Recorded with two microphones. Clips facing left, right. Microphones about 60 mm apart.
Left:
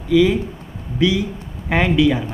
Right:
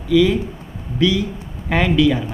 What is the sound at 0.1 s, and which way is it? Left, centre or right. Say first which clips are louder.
Speech: even; centre.